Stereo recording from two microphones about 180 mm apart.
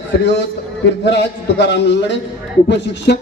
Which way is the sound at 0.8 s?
75° left (ahead or behind).